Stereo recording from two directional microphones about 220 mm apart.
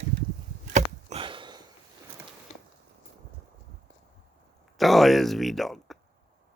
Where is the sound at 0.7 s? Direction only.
30° right (ahead or behind).